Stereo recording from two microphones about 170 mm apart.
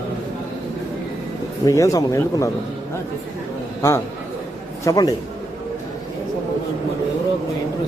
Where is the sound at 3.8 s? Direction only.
15° left (ahead or behind).